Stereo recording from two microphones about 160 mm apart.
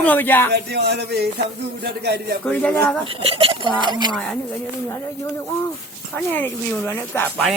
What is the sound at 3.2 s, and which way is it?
Speech, 35° right (ahead or behind).